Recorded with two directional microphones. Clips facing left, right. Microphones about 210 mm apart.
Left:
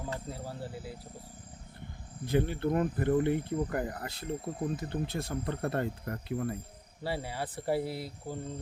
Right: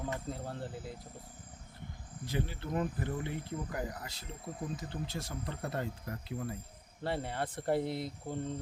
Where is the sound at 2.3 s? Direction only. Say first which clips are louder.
Left 8 dB; 55° left (ahead or behind).